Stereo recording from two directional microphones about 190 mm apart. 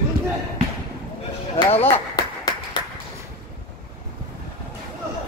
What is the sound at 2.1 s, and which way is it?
Clapping, 20° left (ahead or behind).